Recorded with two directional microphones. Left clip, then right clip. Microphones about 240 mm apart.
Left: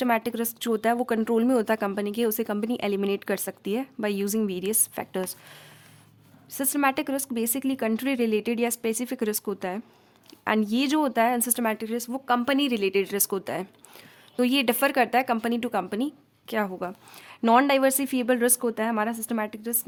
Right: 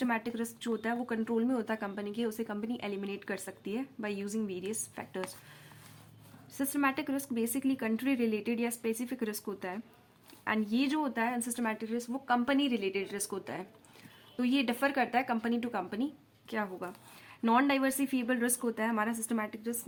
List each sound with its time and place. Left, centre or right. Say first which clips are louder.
0.0 s speech: left 9 dB; left